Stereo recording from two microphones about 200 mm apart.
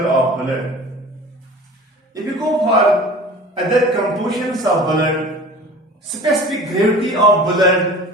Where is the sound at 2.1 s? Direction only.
20° right (ahead or behind).